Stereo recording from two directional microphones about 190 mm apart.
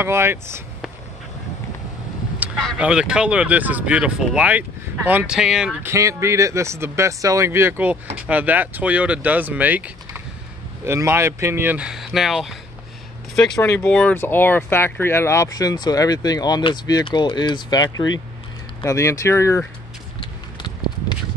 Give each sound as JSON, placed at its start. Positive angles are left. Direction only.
{"t": 0.0, "sound": "speech", "side_deg": -15}
{"t": 2.6, "sound": "speech", "side_deg": -5}
{"t": 13.6, "sound": "speech", "side_deg": 15}